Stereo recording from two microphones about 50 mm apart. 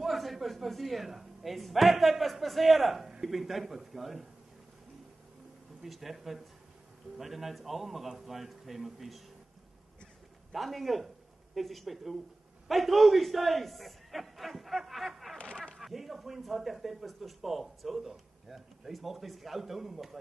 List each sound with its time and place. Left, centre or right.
0.0 s a man's voice: centre
5.8 s speech: centre
10.5 s a man's voice: centre
15.5 s a sound: centre
15.8 s speech: centre